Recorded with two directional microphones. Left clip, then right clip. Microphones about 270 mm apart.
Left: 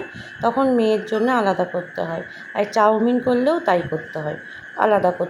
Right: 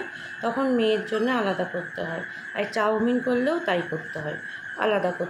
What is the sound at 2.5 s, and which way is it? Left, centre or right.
A woman's voice, centre.